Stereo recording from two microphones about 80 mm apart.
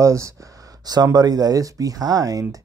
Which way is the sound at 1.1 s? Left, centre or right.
Right.